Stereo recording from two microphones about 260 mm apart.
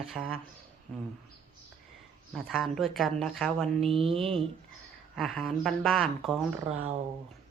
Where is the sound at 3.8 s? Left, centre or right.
Right.